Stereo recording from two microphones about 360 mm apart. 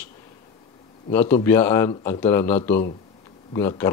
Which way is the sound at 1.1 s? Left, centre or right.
Centre.